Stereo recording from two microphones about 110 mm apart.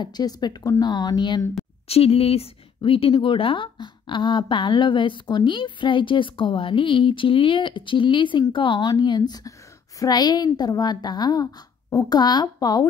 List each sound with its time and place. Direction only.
0.0 s a woman's voice: 40° left (ahead or behind)
1.9 s a woman's voice: 65° left (ahead or behind); by 12.8 s 40° left (ahead or behind)